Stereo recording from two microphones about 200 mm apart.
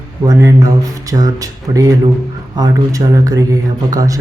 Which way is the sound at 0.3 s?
15° right (ahead or behind).